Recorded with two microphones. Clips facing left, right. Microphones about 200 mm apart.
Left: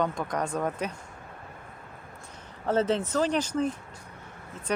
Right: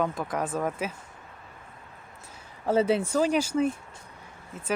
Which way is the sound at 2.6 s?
10° right (ahead or behind).